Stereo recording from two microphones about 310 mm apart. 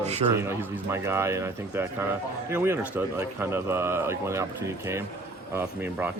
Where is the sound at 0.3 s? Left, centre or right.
Centre.